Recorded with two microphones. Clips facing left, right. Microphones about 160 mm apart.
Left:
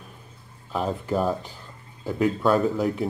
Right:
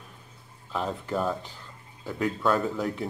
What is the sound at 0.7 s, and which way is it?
Speech, 10° left (ahead or behind).